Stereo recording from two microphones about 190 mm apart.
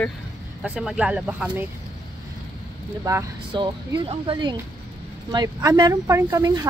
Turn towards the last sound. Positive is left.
turn(degrees=-20)  # may be behind; listen again after turning